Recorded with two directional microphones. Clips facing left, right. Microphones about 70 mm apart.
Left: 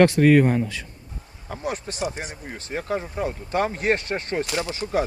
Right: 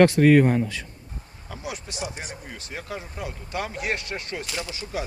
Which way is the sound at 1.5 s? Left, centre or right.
Left.